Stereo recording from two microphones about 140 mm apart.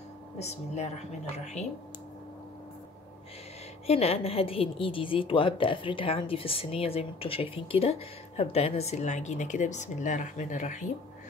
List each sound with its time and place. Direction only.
0.4 s a woman's voice: 50° left (ahead or behind)
3.8 s a woman's voice: 45° left (ahead or behind)